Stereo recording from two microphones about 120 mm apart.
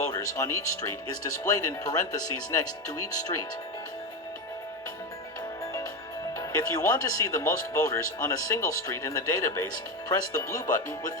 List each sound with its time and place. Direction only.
0.1 s speech: 30° left (ahead or behind)
6.4 s speech: 25° left (ahead or behind)